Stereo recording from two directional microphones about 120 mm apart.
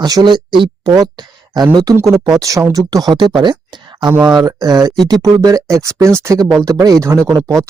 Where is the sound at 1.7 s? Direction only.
30° right (ahead or behind).